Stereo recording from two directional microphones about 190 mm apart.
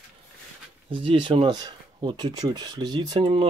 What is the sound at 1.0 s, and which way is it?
Speech, 25° right (ahead or behind).